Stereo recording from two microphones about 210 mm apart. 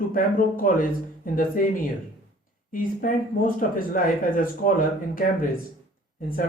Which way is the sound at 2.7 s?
40° left (ahead or behind).